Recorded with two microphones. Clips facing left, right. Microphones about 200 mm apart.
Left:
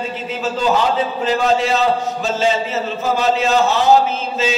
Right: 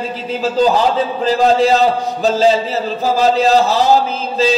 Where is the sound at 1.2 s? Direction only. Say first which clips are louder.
Right 5 dB; 35° right (ahead or behind).